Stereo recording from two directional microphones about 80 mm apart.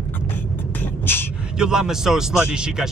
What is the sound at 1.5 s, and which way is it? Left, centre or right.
Speech, centre.